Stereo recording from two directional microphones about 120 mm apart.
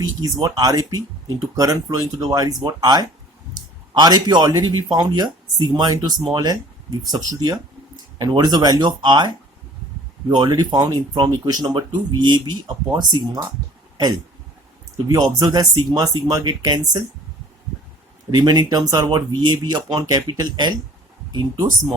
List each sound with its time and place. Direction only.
0.0 s speech: 30° right (ahead or behind)
15.1 s speech: 30° right (ahead or behind)
18.3 s speech: 35° right (ahead or behind)